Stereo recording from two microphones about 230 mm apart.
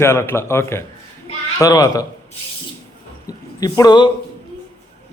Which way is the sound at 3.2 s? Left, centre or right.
Centre.